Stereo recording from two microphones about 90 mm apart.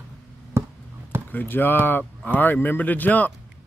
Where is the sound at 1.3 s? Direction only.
25° left (ahead or behind).